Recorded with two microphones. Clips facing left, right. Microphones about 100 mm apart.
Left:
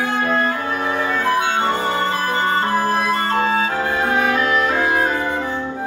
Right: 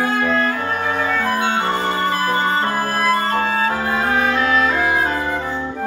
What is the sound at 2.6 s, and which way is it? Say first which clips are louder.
Music: left 2 dB; 20° left (ahead or behind).